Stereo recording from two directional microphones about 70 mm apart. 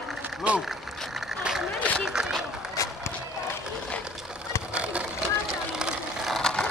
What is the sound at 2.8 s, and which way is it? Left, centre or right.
Run, left.